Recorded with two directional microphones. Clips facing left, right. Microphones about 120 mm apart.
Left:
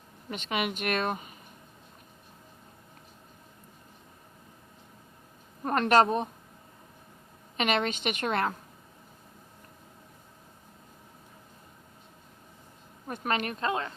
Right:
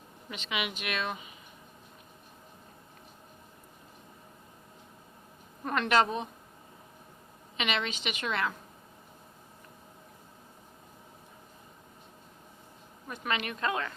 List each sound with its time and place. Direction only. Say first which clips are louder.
0.3 s a woman's voice: left 4 dB; 45° left (ahead or behind)
5.6 s a woman's voice: left 4 dB; 40° left (ahead or behind)
7.5 s a woman's voice: left 5 dB; 45° left (ahead or behind)
13.1 s speech: left 3 dB; 45° left (ahead or behind)